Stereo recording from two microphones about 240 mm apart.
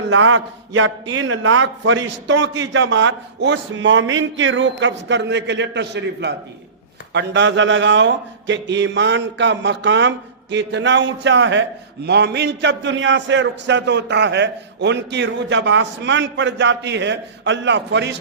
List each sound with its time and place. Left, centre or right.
0.1 s a man's voice: right